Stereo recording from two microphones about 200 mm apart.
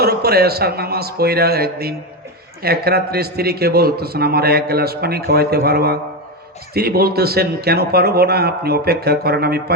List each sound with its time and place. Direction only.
0.0 s a man's voice: 50° right (ahead or behind)